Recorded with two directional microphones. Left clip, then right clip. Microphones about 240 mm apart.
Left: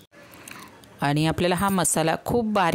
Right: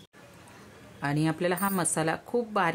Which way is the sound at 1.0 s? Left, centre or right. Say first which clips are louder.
Left 5 dB; left.